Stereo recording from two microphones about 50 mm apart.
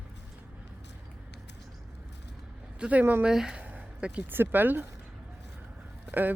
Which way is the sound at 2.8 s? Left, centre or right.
Right.